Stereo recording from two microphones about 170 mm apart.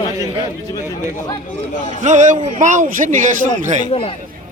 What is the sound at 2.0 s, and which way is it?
A man's voice, 45° right (ahead or behind).